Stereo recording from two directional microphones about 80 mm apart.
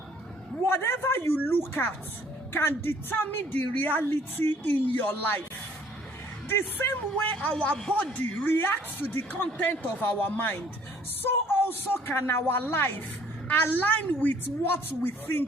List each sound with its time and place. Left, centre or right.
0.6 s a man's voice: left
6.5 s a woman's voice: left
7.4 s a woman's voice: centre